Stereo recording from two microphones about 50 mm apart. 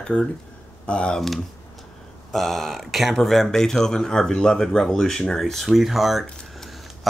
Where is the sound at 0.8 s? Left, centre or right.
Left.